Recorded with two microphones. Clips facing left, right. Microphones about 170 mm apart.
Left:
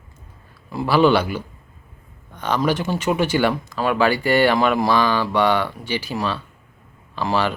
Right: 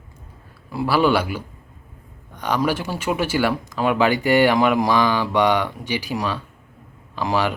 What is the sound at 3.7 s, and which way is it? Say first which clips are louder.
Speech: even; 15° right (ahead or behind).